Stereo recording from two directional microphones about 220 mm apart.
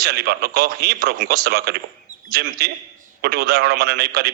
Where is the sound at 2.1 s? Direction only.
35° right (ahead or behind).